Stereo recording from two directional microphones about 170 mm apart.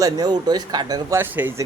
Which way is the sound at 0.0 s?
25° right (ahead or behind).